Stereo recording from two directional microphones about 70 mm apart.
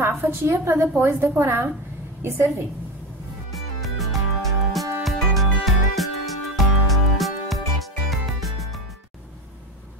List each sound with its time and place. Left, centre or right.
0.0 s a woman's voice: right
3.5 s music: centre